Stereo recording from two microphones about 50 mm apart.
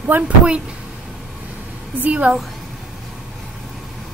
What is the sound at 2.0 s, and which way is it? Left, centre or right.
Speech, right.